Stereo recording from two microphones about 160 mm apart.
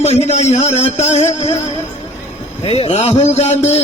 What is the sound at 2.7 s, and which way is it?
A man's voice, 40° left (ahead or behind).